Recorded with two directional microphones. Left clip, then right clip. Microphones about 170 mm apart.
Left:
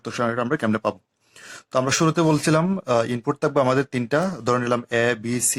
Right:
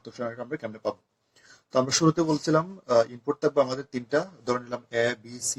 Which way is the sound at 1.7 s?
40° left (ahead or behind).